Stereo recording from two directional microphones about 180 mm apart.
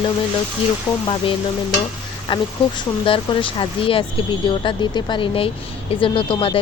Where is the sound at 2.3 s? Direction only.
30° left (ahead or behind).